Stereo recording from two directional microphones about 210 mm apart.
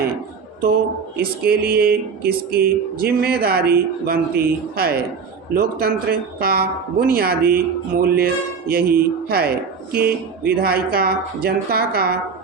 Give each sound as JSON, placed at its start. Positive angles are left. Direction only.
{"t": 1.1, "sound": "a woman's voice", "side_deg": -45}